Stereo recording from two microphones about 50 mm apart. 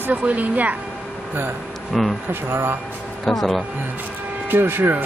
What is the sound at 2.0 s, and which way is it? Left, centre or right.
Speech, centre.